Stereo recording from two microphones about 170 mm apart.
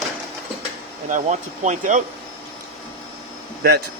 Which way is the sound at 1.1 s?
45° right (ahead or behind).